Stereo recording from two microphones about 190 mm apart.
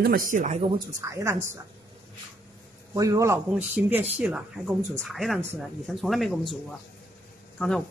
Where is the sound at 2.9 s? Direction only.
15° right (ahead or behind); by 6.5 s centre (ahead or behind).